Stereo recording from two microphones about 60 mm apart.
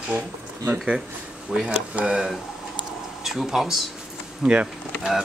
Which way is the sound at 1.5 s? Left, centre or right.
Centre.